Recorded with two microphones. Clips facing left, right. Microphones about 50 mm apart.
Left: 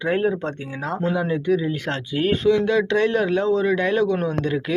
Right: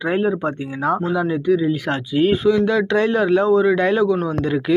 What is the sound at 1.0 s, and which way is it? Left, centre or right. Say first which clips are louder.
A man's voice: right 3 dB; centre.